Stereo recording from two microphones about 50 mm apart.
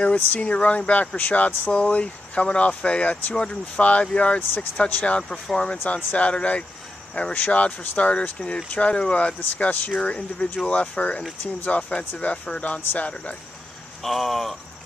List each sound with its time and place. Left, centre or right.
0.0 s speech: left
14.0 s speech: centre